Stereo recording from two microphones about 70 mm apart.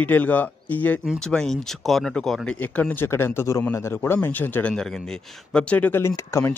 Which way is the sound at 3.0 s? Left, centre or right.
Left.